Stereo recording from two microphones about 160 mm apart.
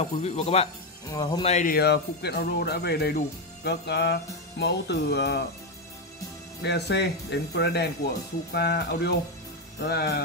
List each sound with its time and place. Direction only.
0.0 s speech: 45° left (ahead or behind)
1.0 s music: 25° left (ahead or behind)
1.4 s speech: 45° left (ahead or behind)
1.7 s speech: 90° left
6.6 s speech: 90° left
9.8 s music: 85° left